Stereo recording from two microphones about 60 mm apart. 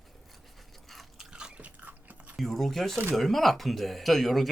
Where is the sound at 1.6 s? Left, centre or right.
Right.